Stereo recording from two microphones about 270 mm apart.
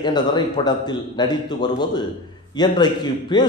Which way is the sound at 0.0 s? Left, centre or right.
Centre.